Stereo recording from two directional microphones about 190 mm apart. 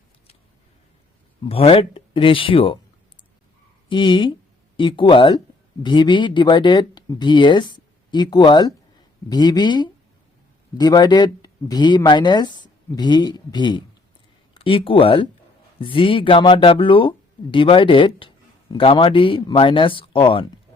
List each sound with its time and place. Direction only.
1.5 s speech: 30° left (ahead or behind)
3.8 s speech: 25° left (ahead or behind)